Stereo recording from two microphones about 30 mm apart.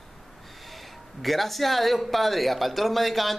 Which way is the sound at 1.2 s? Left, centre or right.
Centre.